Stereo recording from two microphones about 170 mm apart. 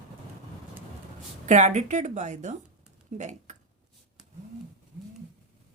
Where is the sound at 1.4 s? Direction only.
45° right (ahead or behind).